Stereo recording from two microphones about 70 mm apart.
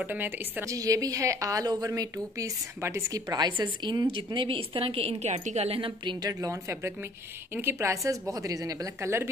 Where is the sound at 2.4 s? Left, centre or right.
Right.